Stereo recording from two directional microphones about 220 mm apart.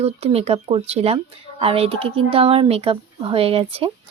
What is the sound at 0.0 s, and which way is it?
Speech, 30° right (ahead or behind).